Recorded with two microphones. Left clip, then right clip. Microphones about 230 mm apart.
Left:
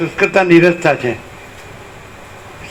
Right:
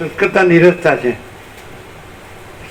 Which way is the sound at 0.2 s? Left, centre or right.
Left.